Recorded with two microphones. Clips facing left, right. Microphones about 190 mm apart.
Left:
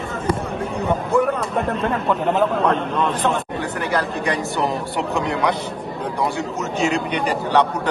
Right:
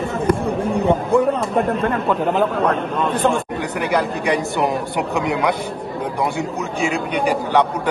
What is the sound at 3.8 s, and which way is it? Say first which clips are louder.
A man's voice: right 3 dB; 15° right (ahead or behind).